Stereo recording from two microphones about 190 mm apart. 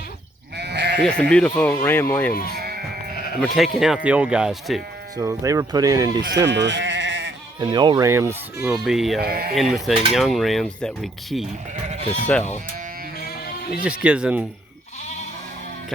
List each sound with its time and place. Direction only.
0.5 s sheep: 60° right (ahead or behind)
1.0 s speech: 5° left (ahead or behind)
2.5 s sheep: 55° right (ahead or behind)
3.4 s cutlery: centre (ahead or behind)
5.1 s speech: 15° right (ahead or behind)
6.3 s sheep: 70° right (ahead or behind)
7.6 s speech: 25° right (ahead or behind)
8.8 s cutlery: centre (ahead or behind)
9.2 s speech: 55° right (ahead or behind)
9.6 s cutlery: centre (ahead or behind)
12.3 s speech: 5° left (ahead or behind)
13.8 s cutlery: 5° right (ahead or behind)